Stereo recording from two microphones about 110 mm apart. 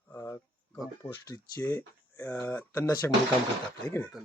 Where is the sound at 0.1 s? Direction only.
20° left (ahead or behind).